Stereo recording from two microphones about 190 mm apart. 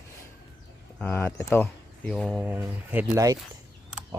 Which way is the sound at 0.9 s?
10° left (ahead or behind).